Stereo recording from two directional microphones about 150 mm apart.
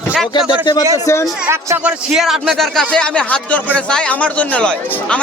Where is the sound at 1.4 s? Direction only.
15° right (ahead or behind).